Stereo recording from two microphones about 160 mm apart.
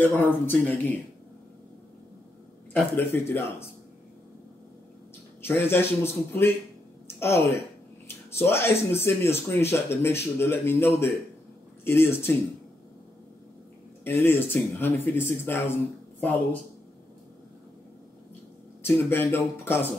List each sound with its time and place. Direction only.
0.0 s speech: 10° left (ahead or behind)
2.7 s speech: 15° left (ahead or behind)
5.4 s speech: 15° left (ahead or behind)
7.1 s a sound: 15° left (ahead or behind)
8.4 s speech: 15° left (ahead or behind)
14.0 s speech: 15° left (ahead or behind)
18.8 s speech: 15° left (ahead or behind)